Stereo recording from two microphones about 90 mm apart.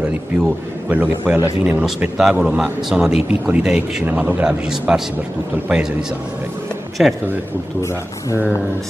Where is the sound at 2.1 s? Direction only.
5° right (ahead or behind).